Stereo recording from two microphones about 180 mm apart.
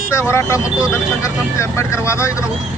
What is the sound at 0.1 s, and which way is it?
Speech, 15° left (ahead or behind).